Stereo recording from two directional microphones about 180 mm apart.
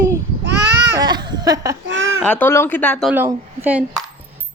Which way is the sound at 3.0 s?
15° right (ahead or behind).